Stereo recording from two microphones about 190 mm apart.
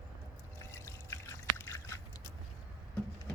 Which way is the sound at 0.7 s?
15° left (ahead or behind).